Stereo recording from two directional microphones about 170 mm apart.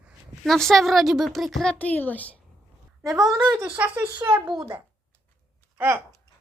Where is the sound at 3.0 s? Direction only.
Centre (ahead or behind).